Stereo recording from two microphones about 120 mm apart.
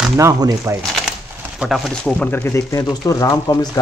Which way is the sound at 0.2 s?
30° right (ahead or behind).